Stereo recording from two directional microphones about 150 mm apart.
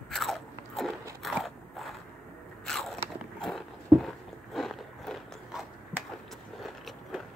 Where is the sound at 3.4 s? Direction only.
Centre (ahead or behind).